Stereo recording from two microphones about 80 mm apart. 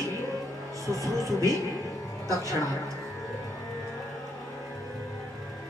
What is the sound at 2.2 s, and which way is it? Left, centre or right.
Speech, right.